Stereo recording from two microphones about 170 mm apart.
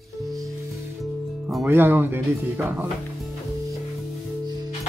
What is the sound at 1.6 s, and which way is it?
Speech, 10° right (ahead or behind).